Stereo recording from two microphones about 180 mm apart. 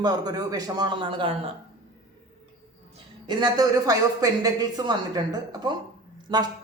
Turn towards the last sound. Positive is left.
turn(degrees=-25)  # may be behind; listen again after turning